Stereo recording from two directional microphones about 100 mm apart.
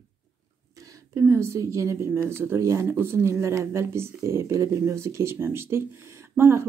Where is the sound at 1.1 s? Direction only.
25° right (ahead or behind).